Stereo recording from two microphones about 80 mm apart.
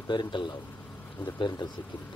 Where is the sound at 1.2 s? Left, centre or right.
Left.